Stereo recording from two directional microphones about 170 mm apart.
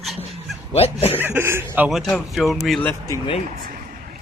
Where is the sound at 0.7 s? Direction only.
35° left (ahead or behind).